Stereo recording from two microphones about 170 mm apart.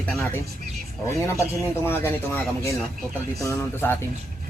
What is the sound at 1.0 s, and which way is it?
Speech, 15° left (ahead or behind).